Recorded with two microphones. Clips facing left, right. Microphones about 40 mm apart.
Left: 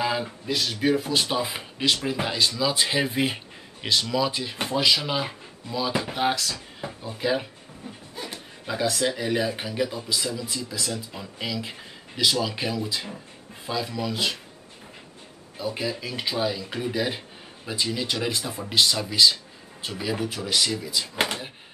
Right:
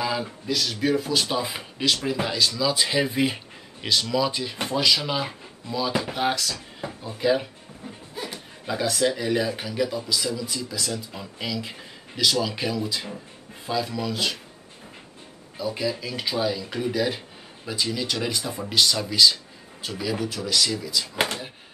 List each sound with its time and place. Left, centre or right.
0.0 s speech: centre
15.5 s speech: centre
21.2 s a sound: centre